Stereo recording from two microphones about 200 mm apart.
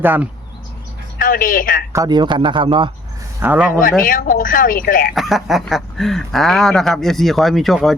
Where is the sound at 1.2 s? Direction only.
45° left (ahead or behind).